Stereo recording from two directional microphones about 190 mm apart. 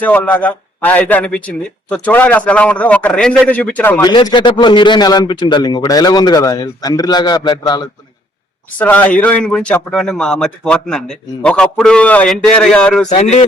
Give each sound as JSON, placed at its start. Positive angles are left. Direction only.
{"t": 0.0, "sound": "a man's voice", "side_deg": 10}
{"t": 4.0, "sound": "a man's voice", "side_deg": 20}
{"t": 8.8, "sound": "a man's voice", "side_deg": 10}